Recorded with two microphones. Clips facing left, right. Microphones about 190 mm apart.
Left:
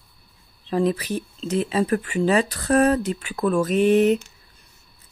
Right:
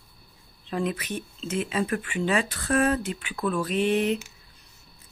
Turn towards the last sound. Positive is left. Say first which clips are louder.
# left 7 dB
turn(degrees=45)  # may be behind; listen again after turning